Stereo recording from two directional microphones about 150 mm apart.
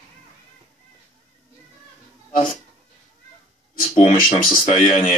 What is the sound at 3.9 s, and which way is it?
Speech, 50° left (ahead or behind).